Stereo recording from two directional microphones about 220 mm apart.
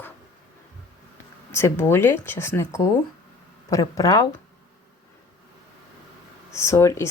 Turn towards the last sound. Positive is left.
turn(degrees=15)  # may be behind; listen again after turning